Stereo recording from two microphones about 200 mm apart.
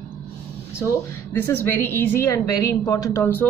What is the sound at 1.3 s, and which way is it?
A woman's voice, 10° left (ahead or behind).